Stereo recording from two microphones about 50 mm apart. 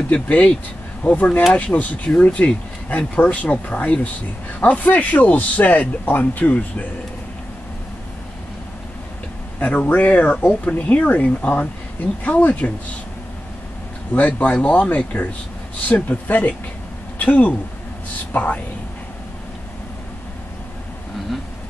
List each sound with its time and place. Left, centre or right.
0.1 s a man's voice: left
9.6 s a man's voice: left
14.1 s a man's voice: left